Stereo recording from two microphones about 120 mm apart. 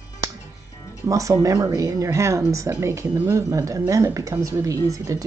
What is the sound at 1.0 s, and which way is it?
Speech, 30° right (ahead or behind).